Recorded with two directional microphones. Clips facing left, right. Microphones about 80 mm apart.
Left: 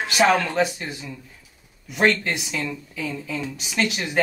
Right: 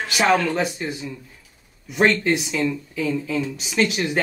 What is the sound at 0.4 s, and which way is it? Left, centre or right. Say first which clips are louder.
Speech: even; centre.